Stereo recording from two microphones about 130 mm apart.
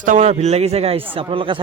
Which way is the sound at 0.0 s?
75° right (ahead or behind).